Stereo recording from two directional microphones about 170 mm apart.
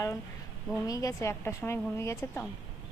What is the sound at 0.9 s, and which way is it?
A woman's voice, 20° left (ahead or behind).